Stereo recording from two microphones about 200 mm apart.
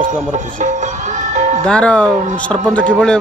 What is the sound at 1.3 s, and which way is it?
Music, 35° right (ahead or behind).